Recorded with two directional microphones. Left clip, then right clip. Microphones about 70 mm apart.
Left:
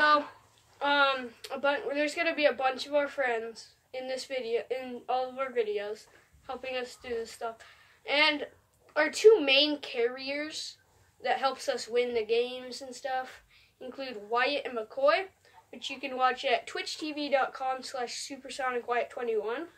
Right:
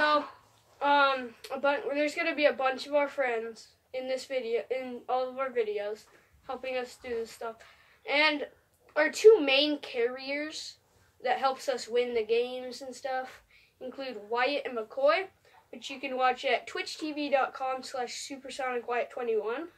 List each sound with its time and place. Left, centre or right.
0.7 s speech: left